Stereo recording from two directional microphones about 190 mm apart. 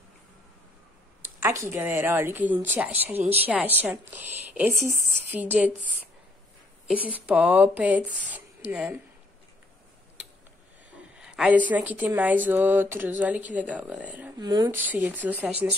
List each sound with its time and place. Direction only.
1.2 s speech: 15° right (ahead or behind)
6.9 s speech: 5° right (ahead or behind)
11.1 s a woman's voice: 5° right (ahead or behind)
14.4 s a woman's voice: 20° right (ahead or behind)
14.9 s speech: 10° right (ahead or behind)